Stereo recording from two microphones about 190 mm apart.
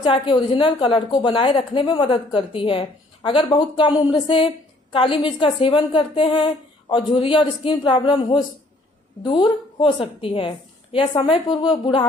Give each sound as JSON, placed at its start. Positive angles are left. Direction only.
{"t": 0.0, "sound": "a woman's voice", "side_deg": 25}